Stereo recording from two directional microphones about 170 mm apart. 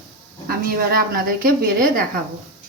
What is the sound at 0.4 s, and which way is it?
Speech, 60° right (ahead or behind).